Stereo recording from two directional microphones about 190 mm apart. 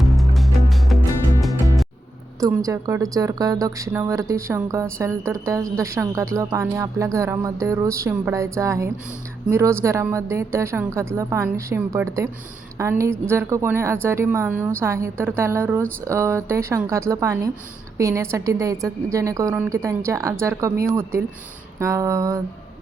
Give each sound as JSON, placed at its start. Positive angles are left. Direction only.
{"t": 0.2, "sound": "music", "side_deg": 0}
{"t": 2.6, "sound": "speech", "side_deg": -15}